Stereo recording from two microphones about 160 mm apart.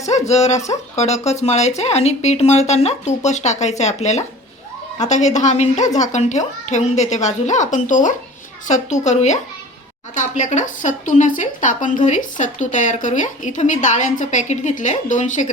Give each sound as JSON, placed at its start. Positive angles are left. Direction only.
{"t": 0.1, "sound": "speech", "side_deg": 45}